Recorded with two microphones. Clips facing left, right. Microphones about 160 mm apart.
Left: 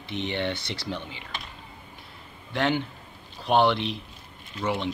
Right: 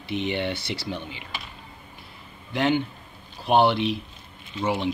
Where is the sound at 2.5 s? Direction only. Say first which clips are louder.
Right 3 dB; 5° right (ahead or behind).